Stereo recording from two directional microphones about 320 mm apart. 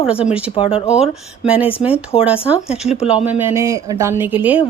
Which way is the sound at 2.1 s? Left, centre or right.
Centre.